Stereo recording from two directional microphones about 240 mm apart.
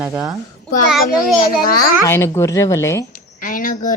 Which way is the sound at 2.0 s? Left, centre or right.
Centre.